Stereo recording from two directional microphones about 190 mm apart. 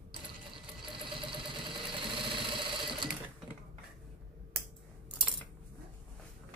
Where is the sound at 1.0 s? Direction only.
25° right (ahead or behind).